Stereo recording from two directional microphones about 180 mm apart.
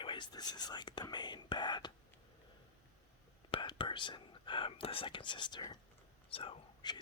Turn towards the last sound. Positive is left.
turn(degrees=25)  # may be behind; listen again after turning